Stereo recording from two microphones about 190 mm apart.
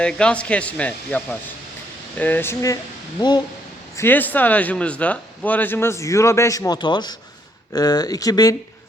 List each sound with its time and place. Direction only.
0.0 s a man's voice: 5° left (ahead or behind); by 3.4 s 25° left (ahead or behind)
3.9 s a man's voice: 10° left (ahead or behind)